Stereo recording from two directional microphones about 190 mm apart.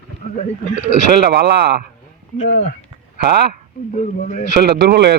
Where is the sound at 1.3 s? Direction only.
60° right (ahead or behind).